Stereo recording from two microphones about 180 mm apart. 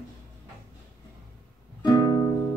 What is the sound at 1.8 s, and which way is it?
Music, 25° left (ahead or behind).